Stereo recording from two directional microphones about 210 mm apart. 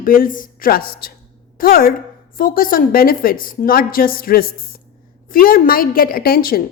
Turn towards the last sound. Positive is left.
turn(degrees=45)  # may be behind; listen again after turning